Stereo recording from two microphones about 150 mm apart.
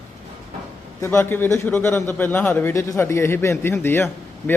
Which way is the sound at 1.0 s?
15° left (ahead or behind).